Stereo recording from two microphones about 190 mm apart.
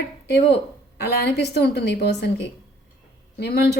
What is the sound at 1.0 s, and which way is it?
A woman's voice, 60° left (ahead or behind).